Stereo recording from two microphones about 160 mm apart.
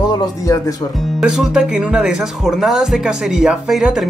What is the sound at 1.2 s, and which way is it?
Speech, 5° right (ahead or behind).